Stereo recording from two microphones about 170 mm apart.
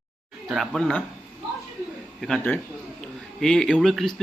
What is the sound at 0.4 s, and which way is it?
Speech, centre (ahead or behind).